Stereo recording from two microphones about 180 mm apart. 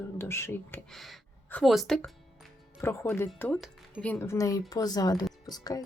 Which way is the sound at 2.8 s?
15° left (ahead or behind).